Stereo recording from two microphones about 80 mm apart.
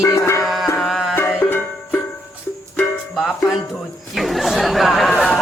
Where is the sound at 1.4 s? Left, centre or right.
Left.